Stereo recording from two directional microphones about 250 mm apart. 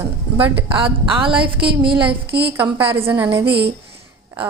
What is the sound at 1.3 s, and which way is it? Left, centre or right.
Speech, centre.